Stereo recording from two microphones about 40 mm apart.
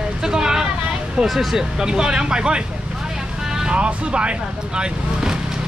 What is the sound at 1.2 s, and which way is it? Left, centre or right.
Speech, centre.